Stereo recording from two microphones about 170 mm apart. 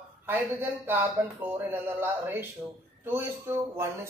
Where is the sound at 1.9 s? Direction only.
10° right (ahead or behind).